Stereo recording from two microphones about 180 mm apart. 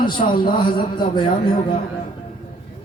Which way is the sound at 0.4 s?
25° left (ahead or behind).